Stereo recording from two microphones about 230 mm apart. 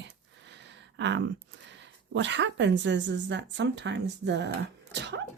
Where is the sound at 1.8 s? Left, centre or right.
Right.